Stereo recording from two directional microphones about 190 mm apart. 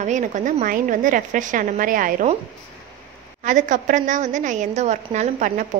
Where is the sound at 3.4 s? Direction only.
40° right (ahead or behind).